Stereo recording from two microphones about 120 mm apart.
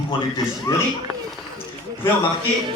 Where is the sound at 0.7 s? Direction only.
25° left (ahead or behind).